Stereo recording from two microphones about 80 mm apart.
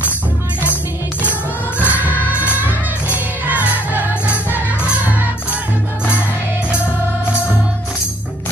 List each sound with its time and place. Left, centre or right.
1.9 s music: centre